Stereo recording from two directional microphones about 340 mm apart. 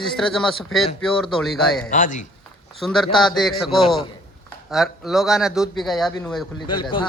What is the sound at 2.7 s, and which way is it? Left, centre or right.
A man's voice, centre.